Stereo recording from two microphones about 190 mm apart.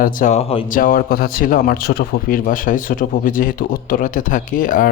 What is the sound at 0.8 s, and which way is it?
A man's voice, 50° left (ahead or behind).